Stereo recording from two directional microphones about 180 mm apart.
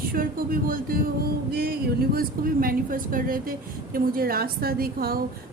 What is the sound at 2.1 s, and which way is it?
A woman's voice, 55° right (ahead or behind).